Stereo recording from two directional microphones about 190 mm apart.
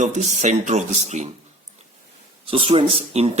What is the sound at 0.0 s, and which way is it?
Speech, 40° right (ahead or behind).